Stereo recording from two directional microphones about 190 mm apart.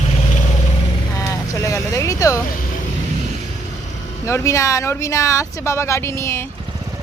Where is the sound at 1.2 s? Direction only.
15° left (ahead or behind).